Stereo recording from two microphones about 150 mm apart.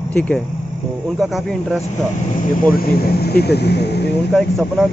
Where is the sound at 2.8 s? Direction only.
90° left.